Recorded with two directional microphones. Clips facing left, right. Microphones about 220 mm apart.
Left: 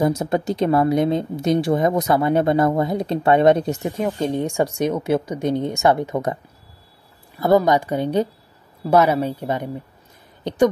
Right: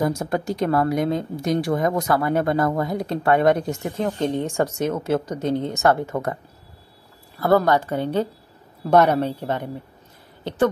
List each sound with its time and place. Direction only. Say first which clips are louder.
0.0 s speech: left 3 dB; 20° left (ahead or behind)
7.3 s speech: left 2 dB; 15° left (ahead or behind)
8.8 s speech: even; 5° left (ahead or behind)